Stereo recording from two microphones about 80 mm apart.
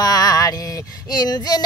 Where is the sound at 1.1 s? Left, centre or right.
Left.